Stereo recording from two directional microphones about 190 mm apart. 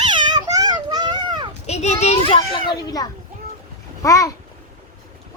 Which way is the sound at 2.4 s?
20° left (ahead or behind).